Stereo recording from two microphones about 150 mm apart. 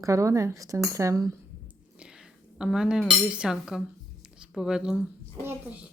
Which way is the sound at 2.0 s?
5° right (ahead or behind).